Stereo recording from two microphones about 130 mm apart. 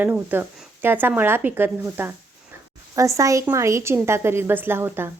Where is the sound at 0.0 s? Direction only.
15° right (ahead or behind).